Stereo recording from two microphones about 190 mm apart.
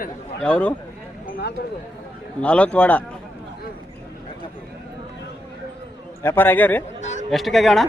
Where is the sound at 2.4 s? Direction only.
5° left (ahead or behind).